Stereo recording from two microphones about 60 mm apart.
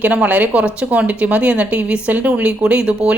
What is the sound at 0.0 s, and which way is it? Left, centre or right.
Speech, right.